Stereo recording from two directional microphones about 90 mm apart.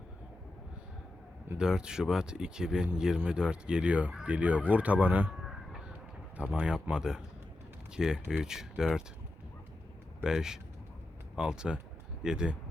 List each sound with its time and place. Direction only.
1.5 s speech: 10° right (ahead or behind)
5.4 s a sound: 5° right (ahead or behind)
6.3 s speech: 15° right (ahead or behind)
10.2 s speech: 5° right (ahead or behind)